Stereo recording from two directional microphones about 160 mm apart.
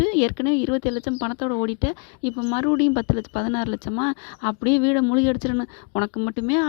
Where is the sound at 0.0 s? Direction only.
35° left (ahead or behind).